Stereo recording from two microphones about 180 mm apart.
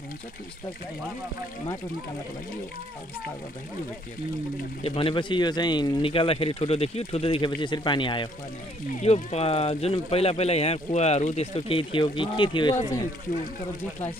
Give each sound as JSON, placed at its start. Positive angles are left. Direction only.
{"t": 4.8, "sound": "speech", "side_deg": 30}